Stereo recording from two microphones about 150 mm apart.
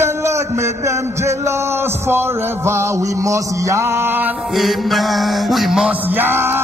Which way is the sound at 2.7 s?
20° right (ahead or behind).